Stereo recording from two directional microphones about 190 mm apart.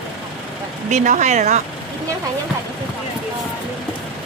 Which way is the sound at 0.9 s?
40° right (ahead or behind).